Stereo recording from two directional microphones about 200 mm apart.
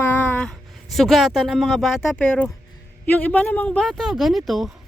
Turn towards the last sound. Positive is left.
turn(degrees=0)  # may be behind; listen again after turning